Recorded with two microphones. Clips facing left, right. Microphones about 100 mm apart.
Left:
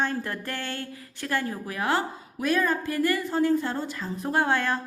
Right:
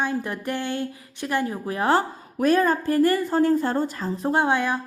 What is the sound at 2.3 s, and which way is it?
A woman's voice, 40° right (ahead or behind).